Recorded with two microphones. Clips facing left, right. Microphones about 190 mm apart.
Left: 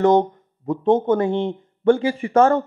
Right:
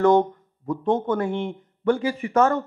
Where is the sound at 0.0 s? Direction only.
20° left (ahead or behind).